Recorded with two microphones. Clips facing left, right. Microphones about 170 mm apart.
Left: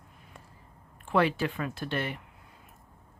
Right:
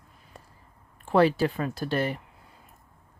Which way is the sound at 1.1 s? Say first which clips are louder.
Right 5 dB; 35° right (ahead or behind).